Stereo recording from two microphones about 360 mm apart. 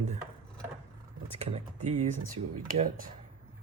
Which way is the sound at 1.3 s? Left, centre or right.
Centre.